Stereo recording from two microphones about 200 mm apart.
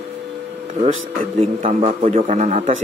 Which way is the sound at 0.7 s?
35° right (ahead or behind).